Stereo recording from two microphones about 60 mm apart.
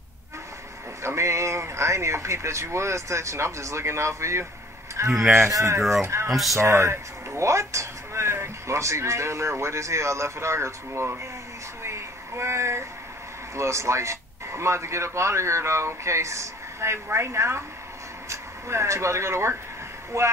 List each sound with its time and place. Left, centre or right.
1.0 s speech: right
5.5 s speech: right
5.8 s speech: centre
6.0 s speech: right
6.3 s speech: centre
6.6 s speech: right
11.8 s a sound: right
13.6 s speech: right